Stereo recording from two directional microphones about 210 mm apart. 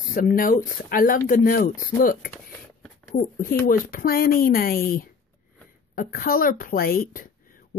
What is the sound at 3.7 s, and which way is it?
A woman's voice, 45° left (ahead or behind).